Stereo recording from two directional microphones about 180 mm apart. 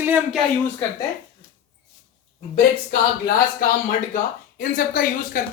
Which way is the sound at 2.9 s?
55° left (ahead or behind).